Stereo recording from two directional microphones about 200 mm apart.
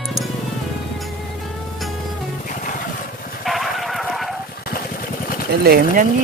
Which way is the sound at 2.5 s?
40° left (ahead or behind).